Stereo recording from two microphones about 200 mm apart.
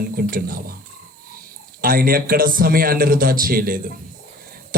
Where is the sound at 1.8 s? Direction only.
45° right (ahead or behind).